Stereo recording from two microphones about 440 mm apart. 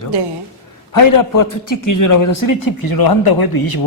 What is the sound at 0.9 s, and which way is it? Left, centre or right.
A man's voice, left.